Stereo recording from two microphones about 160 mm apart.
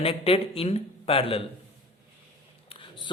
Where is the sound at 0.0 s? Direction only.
35° left (ahead or behind).